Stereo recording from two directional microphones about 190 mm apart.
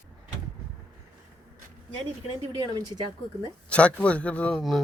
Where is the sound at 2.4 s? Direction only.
20° right (ahead or behind).